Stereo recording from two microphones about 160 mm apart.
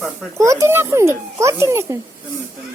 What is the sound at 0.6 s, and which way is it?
A child's voice, 15° right (ahead or behind).